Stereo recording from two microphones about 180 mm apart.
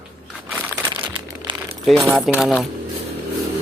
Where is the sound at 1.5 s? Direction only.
25° right (ahead or behind).